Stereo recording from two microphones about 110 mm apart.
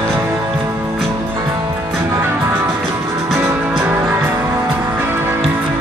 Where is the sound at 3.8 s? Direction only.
20° right (ahead or behind).